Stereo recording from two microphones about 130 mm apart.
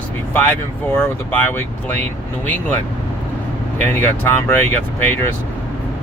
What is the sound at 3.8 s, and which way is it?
Speech, 15° left (ahead or behind).